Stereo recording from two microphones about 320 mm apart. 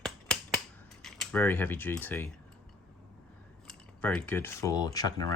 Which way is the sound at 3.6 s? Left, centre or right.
Centre.